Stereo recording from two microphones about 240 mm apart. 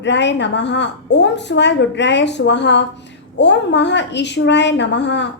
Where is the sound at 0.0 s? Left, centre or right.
Left.